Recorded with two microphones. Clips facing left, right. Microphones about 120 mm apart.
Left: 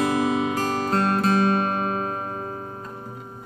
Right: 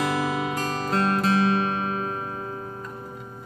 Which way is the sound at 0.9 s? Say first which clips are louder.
Even; 45° left (ahead or behind).